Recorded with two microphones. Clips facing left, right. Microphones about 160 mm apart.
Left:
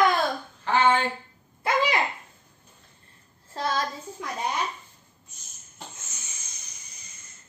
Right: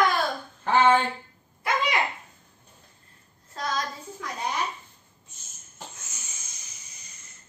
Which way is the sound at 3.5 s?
30° left (ahead or behind).